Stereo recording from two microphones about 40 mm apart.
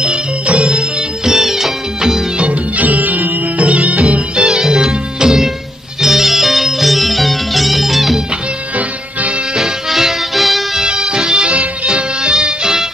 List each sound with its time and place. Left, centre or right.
0.5 s music: right
1.2 s music: centre
2.4 s music: right
4.5 s music: centre
9.6 s music: centre
10.8 s music: centre
11.5 s music: right
11.9 s music: right